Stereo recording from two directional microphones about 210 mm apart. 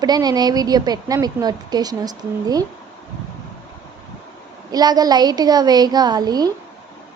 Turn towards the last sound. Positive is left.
turn(degrees=-20)  # may be behind; listen again after turning